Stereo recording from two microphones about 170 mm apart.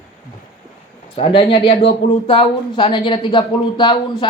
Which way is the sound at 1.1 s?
35° left (ahead or behind).